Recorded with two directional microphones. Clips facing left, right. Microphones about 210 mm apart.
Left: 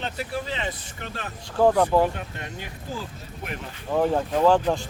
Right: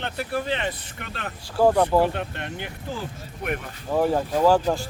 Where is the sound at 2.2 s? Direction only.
65° right (ahead or behind).